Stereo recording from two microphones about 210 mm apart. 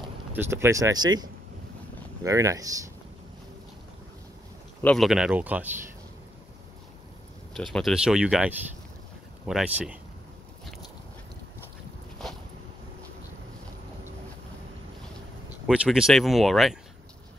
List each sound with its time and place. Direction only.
0.3 s speech: 10° right (ahead or behind)
4.8 s speech: centre (ahead or behind)
7.5 s speech: centre (ahead or behind)
15.6 s speech: 5° right (ahead or behind)